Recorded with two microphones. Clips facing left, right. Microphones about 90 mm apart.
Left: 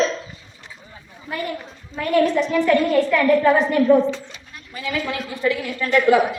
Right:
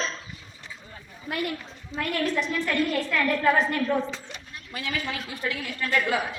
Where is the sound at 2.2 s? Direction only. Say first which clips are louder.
Left 9 dB; 85° left.